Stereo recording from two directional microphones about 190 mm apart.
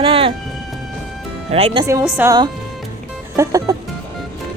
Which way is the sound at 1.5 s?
30° right (ahead or behind).